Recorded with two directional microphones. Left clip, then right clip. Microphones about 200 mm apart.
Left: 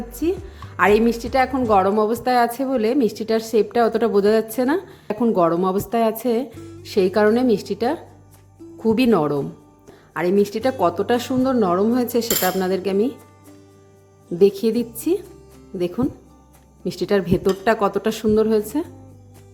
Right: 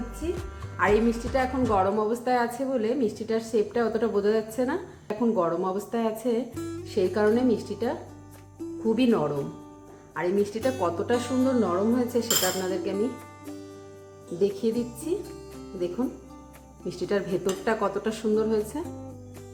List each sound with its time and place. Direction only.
0.2 s music: 55° left (ahead or behind)
0.8 s a woman's voice: 50° left (ahead or behind)
6.6 s music: centre (ahead or behind)
6.8 s a woman's voice: 50° left (ahead or behind)
14.3 s a woman's voice: 45° left (ahead or behind)
16.8 s a woman's voice: 45° left (ahead or behind)